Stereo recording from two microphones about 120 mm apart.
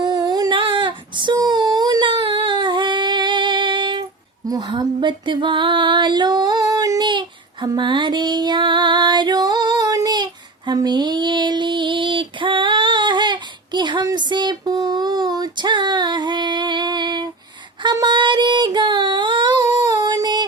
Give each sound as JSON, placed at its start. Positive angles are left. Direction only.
{"t": 0.0, "sound": "female singing", "side_deg": -35}
{"t": 7.1, "sound": "child singing", "side_deg": -40}
{"t": 10.7, "sound": "female singing", "side_deg": -35}
{"t": 17.9, "sound": "child singing", "side_deg": -40}